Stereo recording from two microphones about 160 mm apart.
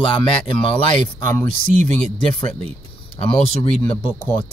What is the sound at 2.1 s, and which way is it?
Speech, 35° left (ahead or behind).